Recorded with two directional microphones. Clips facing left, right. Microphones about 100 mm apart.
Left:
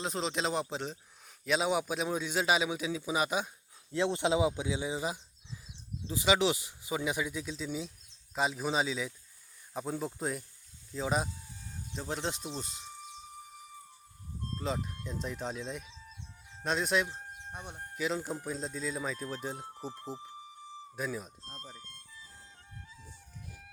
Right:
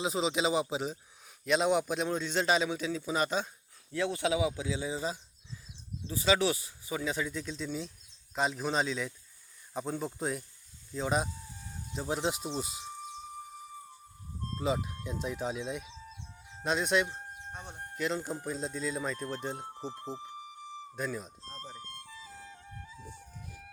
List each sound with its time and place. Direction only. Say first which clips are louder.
0.0 s a man's voice: right 3 dB; 5° right (ahead or behind)
3.9 s a man's voice: left 1 dB; 25° left (ahead or behind); by 12.8 s 10° right (ahead or behind)
14.6 s speech: right 4 dB; 5° right (ahead or behind)
17.5 s speech: left 2 dB; 10° left (ahead or behind)
17.9 s speech: even; centre (ahead or behind)
20.9 s speech: even; 5° left (ahead or behind)
21.4 s speech: right 3 dB; 30° right (ahead or behind)
21.8 s music: right 8 dB; 55° right (ahead or behind)
22.1 s music: right 6 dB; 90° right